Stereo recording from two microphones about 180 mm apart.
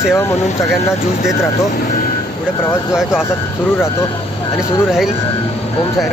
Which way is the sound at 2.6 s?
15° left (ahead or behind).